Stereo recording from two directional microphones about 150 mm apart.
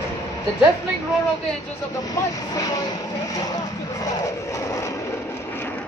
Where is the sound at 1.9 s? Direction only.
25° left (ahead or behind).